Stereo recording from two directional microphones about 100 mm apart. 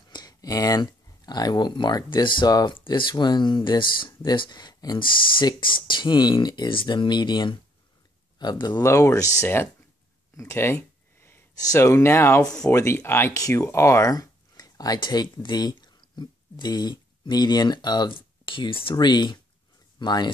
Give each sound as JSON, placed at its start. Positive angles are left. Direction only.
{"t": 0.1, "sound": "speech", "side_deg": 40}
{"t": 8.8, "sound": "speech", "side_deg": 30}
{"t": 10.3, "sound": "a sound", "side_deg": 30}
{"t": 11.5, "sound": "speech", "side_deg": 30}
{"t": 13.3, "sound": "speech", "side_deg": 35}